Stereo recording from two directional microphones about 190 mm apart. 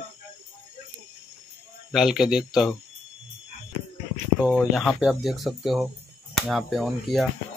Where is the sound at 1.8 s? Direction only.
Centre (ahead or behind).